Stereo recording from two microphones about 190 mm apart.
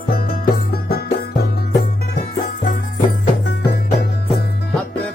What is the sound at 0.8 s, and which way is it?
Music, 55° left (ahead or behind).